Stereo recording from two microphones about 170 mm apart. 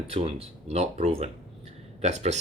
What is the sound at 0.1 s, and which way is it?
Speech, 35° right (ahead or behind).